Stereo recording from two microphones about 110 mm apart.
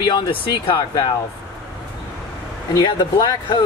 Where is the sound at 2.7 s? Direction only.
35° left (ahead or behind).